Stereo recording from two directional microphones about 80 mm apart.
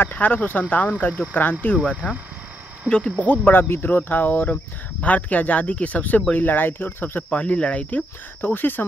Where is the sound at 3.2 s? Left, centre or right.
Left.